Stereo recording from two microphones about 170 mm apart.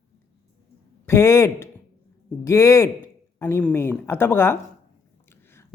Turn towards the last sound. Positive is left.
turn(degrees=15)  # may be behind; listen again after turning